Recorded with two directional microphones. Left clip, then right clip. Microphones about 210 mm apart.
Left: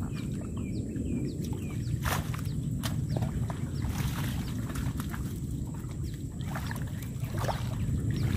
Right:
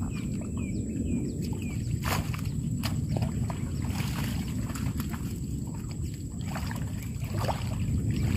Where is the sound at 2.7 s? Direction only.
5° left (ahead or behind).